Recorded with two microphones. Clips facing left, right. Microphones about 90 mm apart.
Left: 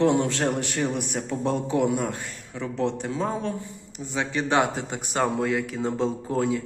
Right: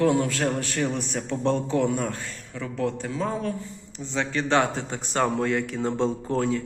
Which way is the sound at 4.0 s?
15° left (ahead or behind).